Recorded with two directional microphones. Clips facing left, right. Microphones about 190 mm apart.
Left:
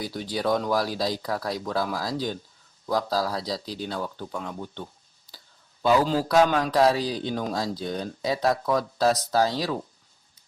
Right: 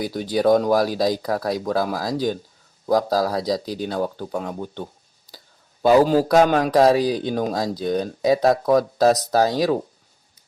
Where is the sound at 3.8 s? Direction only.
45° right (ahead or behind).